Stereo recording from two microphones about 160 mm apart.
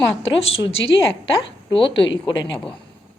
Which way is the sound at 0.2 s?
40° left (ahead or behind).